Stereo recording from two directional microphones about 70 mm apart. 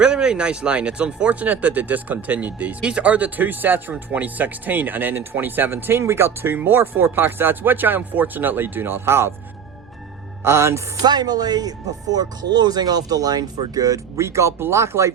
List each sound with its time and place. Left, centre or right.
0.0 s speech: centre; by 9.3 s right
10.4 s music: right
11.0 s speech: right
14.2 s speech: right